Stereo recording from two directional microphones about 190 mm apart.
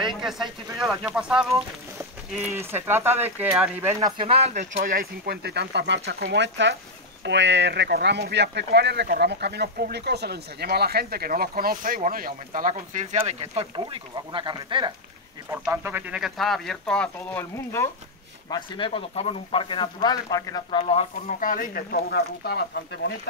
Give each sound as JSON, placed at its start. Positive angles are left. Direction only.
{"t": 0.1, "sound": "speech", "side_deg": 0}
{"t": 2.5, "sound": "speech", "side_deg": -10}
{"t": 4.0, "sound": "speech", "side_deg": -30}
{"t": 4.7, "sound": "speech", "side_deg": -50}
{"t": 15.5, "sound": "speech", "side_deg": -10}
{"t": 18.5, "sound": "speech", "side_deg": 25}
{"t": 21.4, "sound": "speech", "side_deg": 45}